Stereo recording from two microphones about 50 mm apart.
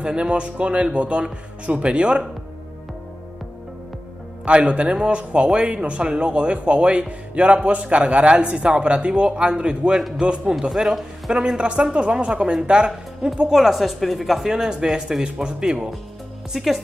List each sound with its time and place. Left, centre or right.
0.0 s speech: centre
4.5 s speech: right
11.3 s speech: centre
13.6 s speech: centre
16.5 s speech: centre